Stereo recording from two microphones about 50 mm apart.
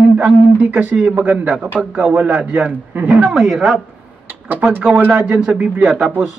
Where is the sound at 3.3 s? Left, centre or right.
Centre.